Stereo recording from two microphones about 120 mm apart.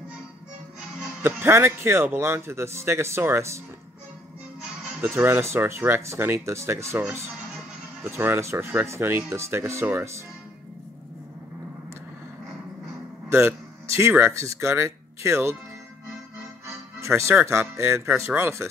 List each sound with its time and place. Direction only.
0.7 s speech: 20° right (ahead or behind)
5.0 s speech: 20° right (ahead or behind)
8.0 s speech: 20° right (ahead or behind)
13.3 s speech: 20° right (ahead or behind)
17.0 s speech: 20° right (ahead or behind)